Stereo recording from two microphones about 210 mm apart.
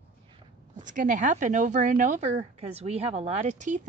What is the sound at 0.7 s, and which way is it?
Speech, 35° right (ahead or behind).